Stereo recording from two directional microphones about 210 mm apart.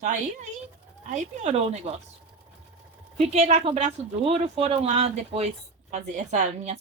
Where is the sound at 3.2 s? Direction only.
30° right (ahead or behind).